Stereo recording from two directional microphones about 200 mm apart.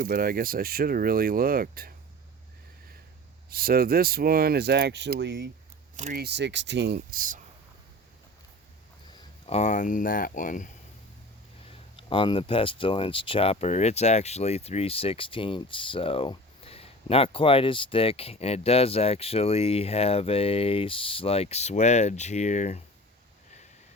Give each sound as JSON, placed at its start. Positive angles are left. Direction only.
{"t": 0.0, "sound": "speech", "side_deg": -45}
{"t": 3.5, "sound": "speech", "side_deg": -50}
{"t": 6.0, "sound": "speech", "side_deg": -35}
{"t": 6.2, "sound": "speech", "side_deg": -55}
{"t": 9.5, "sound": "speech", "side_deg": 35}
{"t": 11.9, "sound": "speech", "side_deg": 25}